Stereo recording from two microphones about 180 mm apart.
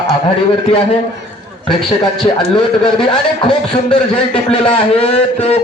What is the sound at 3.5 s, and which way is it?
Speech, 25° left (ahead or behind).